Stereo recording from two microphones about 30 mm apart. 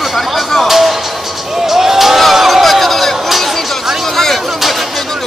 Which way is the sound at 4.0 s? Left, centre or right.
Centre.